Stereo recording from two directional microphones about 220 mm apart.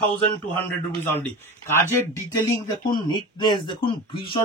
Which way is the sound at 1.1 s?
10° left (ahead or behind).